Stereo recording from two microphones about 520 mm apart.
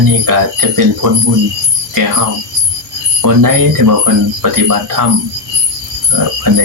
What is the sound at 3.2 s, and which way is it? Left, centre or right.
Speech, right.